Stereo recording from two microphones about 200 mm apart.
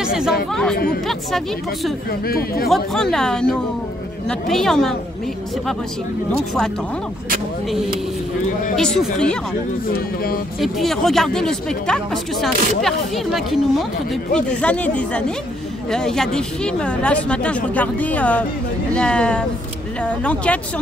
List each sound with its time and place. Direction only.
0.0 s chatter: 5° right (ahead or behind)
0.5 s speech: 5° left (ahead or behind)
2.2 s speech: 50° left (ahead or behind)
2.7 s speech: centre (ahead or behind)
8.7 s speech: centre (ahead or behind)
9.9 s speech: 45° left (ahead or behind)
10.6 s speech: centre (ahead or behind)